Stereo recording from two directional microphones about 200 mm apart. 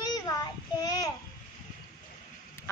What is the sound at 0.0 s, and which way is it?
Child singing, 20° left (ahead or behind).